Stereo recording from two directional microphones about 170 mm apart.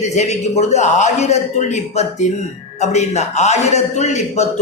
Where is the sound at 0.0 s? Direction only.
40° left (ahead or behind).